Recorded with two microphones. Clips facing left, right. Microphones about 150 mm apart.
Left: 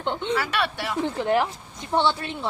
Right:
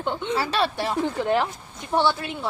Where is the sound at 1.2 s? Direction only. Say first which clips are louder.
Even; 15° left (ahead or behind).